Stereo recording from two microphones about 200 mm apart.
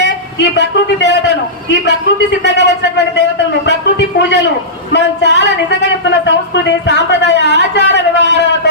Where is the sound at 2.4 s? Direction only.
60° left (ahead or behind).